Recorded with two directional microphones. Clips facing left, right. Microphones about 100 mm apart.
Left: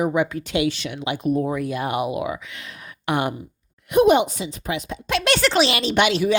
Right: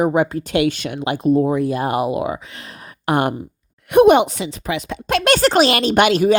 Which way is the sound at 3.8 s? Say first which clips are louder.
Right 5 dB; 60° right (ahead or behind).